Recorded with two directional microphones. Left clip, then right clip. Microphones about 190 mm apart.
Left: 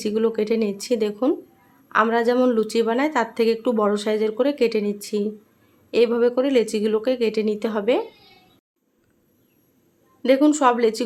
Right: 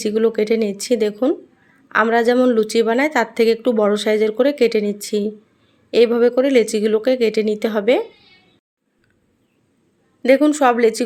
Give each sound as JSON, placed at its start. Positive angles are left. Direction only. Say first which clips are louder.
{"t": 0.0, "sound": "a woman's voice", "louder": "right 4 dB", "side_deg": -15}
{"t": 10.2, "sound": "a woman's voice", "louder": "right 3 dB", "side_deg": -15}